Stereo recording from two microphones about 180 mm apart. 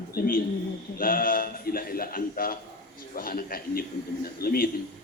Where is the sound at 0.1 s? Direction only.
50° left (ahead or behind).